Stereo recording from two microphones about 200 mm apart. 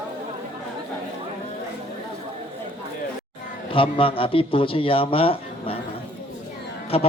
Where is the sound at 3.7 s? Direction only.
25° left (ahead or behind).